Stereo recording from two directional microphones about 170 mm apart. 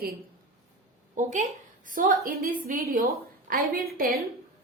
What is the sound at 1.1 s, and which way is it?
A woman's voice, 45° right (ahead or behind).